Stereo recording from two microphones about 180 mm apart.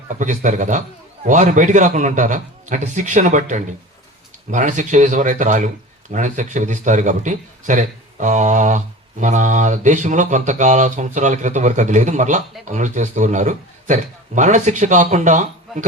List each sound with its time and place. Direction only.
0.1 s speech: 45° right (ahead or behind)